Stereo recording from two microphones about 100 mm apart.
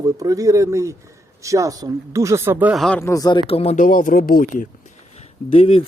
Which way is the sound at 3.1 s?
40° left (ahead or behind).